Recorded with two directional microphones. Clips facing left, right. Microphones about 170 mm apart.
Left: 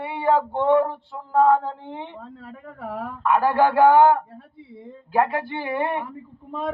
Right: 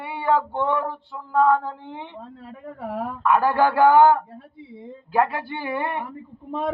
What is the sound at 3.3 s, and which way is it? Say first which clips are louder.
Child singing: left 1 dB; 25° left (ahead or behind).